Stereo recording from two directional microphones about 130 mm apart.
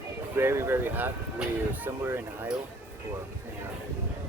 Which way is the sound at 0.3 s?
20° right (ahead or behind).